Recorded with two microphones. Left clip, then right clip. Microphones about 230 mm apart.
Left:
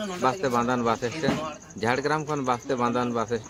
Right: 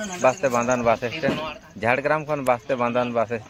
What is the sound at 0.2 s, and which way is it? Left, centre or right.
Speech, centre.